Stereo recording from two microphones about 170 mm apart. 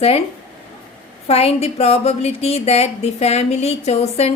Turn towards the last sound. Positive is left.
turn(degrees=40)  # may be behind; listen again after turning